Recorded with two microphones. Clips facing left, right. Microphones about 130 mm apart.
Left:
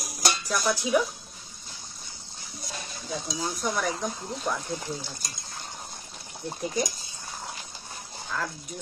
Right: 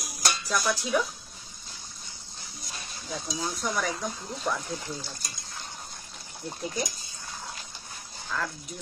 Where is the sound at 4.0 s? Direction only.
Centre (ahead or behind).